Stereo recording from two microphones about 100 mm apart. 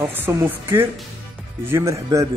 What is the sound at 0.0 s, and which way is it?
Speech, 20° right (ahead or behind).